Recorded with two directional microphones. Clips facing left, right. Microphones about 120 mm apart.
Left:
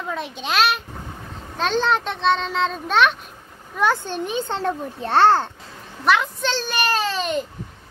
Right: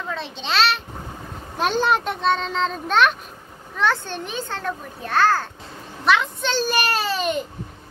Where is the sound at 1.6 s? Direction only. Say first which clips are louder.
Even; 10° right (ahead or behind).